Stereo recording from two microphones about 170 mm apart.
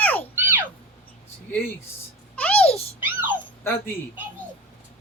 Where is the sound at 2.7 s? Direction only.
35° left (ahead or behind).